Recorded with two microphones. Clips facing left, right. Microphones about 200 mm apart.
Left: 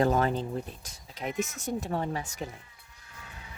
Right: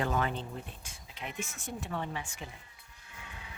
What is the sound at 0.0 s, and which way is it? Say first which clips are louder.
Speech: left 7 dB; 40° left (ahead or behind).